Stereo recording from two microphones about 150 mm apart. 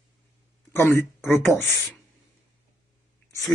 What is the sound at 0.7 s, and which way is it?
Speech, 15° left (ahead or behind).